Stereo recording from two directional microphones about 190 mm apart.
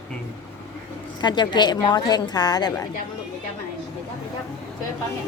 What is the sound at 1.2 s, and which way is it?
A woman's voice, 25° left (ahead or behind).